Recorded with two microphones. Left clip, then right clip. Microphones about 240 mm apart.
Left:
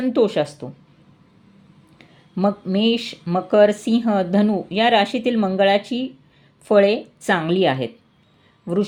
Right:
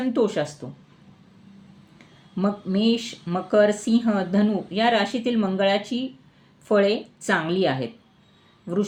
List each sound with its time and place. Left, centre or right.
0.0 s speech: left
2.3 s speech: left